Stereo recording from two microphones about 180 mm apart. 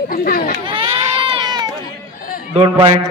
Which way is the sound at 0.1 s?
55° left (ahead or behind).